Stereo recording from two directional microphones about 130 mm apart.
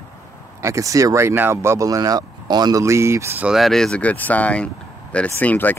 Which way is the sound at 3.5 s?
Centre (ahead or behind).